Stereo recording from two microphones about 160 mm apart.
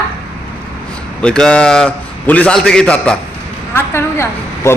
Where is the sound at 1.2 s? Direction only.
5° left (ahead or behind).